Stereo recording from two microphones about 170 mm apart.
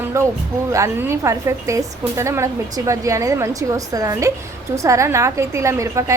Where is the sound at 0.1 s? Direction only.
15° right (ahead or behind).